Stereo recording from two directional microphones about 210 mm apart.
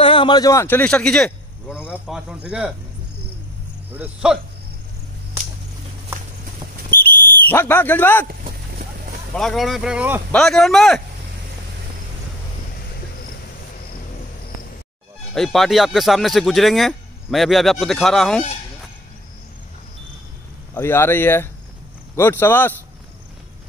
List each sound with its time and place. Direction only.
0.0 s a man's voice: 25° left (ahead or behind); by 2.7 s 5° right (ahead or behind)
3.9 s speech: 5° right (ahead or behind)
7.4 s speech: 10° left (ahead or behind)
8.3 s boat: 45° right (ahead or behind)
9.3 s a man's voice: centre (ahead or behind)
15.3 s a man's voice: centre (ahead or behind)
20.7 s speech: 10° left (ahead or behind)